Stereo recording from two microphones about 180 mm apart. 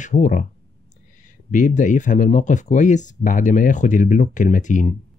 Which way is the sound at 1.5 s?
45° left (ahead or behind).